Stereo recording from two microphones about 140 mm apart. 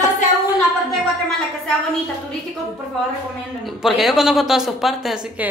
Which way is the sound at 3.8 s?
5° right (ahead or behind).